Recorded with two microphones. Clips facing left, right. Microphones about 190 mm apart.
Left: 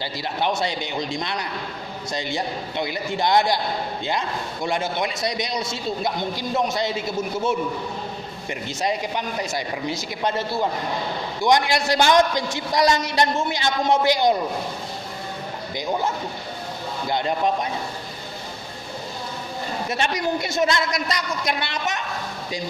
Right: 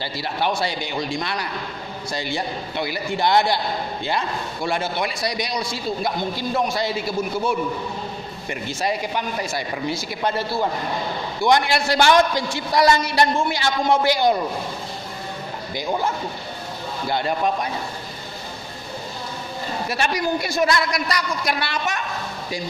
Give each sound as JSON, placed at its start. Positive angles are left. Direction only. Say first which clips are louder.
{"t": 0.0, "sound": "a man's voice", "louder": "right 1 dB", "side_deg": 20}
{"t": 4.6, "sound": "a man's voice", "louder": "even", "side_deg": 20}
{"t": 19.9, "sound": "a man's voice", "louder": "right 1 dB", "side_deg": 20}